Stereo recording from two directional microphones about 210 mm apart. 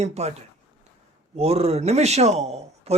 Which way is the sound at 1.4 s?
30° right (ahead or behind).